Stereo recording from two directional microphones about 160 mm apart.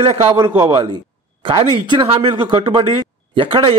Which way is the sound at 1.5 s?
35° right (ahead or behind).